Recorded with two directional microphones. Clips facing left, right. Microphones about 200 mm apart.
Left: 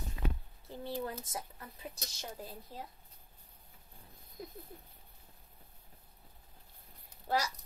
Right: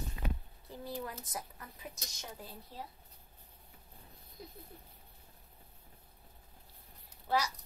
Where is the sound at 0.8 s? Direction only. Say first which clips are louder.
Left 3 dB; 25° left (ahead or behind).